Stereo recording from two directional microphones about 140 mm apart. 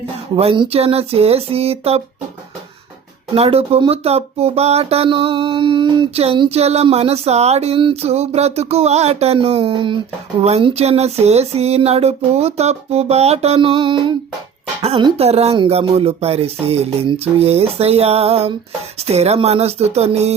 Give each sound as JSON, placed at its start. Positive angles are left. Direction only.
{"t": 0.3, "sound": "speech", "side_deg": -40}
{"t": 3.3, "sound": "speech", "side_deg": -45}
{"t": 14.8, "sound": "speech", "side_deg": -45}